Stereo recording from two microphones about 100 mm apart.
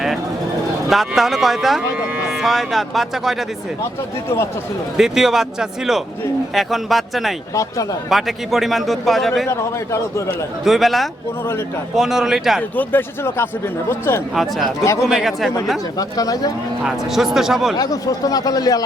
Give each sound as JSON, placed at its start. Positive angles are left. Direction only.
{"t": 0.9, "sound": "a man's voice", "side_deg": 0}
{"t": 4.9, "sound": "a man's voice", "side_deg": -5}
{"t": 7.5, "sound": "speech", "side_deg": 35}
{"t": 8.1, "sound": "a man's voice", "side_deg": 0}
{"t": 9.5, "sound": "a man's voice", "side_deg": 30}
{"t": 10.7, "sound": "a man's voice", "side_deg": 0}
{"t": 12.7, "sound": "a man's voice", "side_deg": 20}
{"t": 15.0, "sound": "a man's voice", "side_deg": 0}
{"t": 16.0, "sound": "speech", "side_deg": 40}
{"t": 16.8, "sound": "a man's voice", "side_deg": -5}
{"t": 17.7, "sound": "speech", "side_deg": 35}